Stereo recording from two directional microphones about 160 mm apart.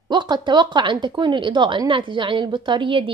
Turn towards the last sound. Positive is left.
turn(degrees=-30)  # may be behind; listen again after turning